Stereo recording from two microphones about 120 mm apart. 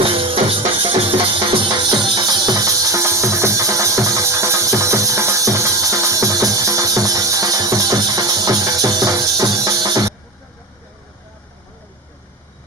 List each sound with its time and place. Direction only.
0.0 s music: 50° right (ahead or behind); by 10.1 s 30° right (ahead or behind)